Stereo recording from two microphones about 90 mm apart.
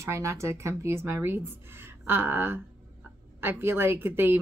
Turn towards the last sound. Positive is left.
turn(degrees=-25)  # may be behind; listen again after turning